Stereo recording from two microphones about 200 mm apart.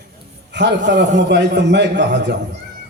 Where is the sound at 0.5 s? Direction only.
60° right (ahead or behind).